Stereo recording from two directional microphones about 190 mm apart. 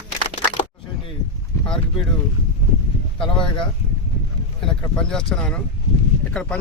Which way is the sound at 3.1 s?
25° left (ahead or behind).